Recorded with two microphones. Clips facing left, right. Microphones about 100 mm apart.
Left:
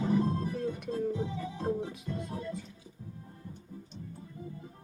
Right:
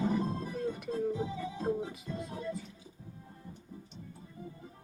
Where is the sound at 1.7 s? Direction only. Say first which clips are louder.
Left 1 dB; 20° right (ahead or behind).